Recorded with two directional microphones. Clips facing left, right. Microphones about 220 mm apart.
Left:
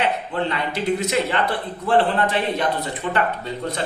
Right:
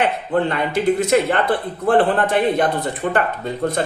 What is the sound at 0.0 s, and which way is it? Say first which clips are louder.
Speech: right 4 dB; 50° right (ahead or behind).